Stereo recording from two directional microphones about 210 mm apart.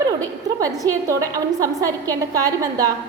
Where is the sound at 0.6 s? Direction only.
15° right (ahead or behind).